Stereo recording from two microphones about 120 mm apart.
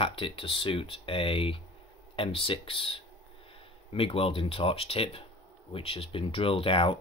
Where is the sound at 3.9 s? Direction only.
50° left (ahead or behind).